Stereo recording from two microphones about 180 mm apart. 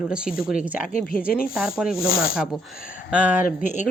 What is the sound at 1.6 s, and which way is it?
Rub, 5° right (ahead or behind).